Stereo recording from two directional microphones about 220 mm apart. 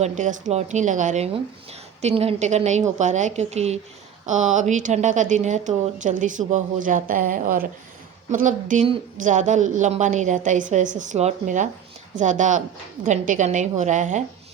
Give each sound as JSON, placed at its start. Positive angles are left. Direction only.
{"t": 0.0, "sound": "a woman's voice", "side_deg": -35}